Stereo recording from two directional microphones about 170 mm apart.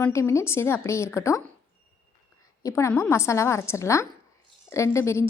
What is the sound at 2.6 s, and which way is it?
Speech, 15° left (ahead or behind).